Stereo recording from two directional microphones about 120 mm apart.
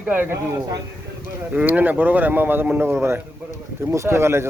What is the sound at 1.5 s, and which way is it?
A man's voice, 15° right (ahead or behind).